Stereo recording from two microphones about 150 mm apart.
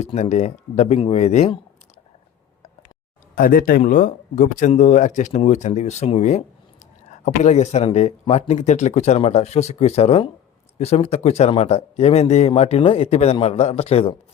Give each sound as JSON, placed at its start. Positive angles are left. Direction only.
{"t": 0.0, "sound": "a man's voice", "side_deg": 50}
{"t": 3.3, "sound": "a man's voice", "side_deg": 70}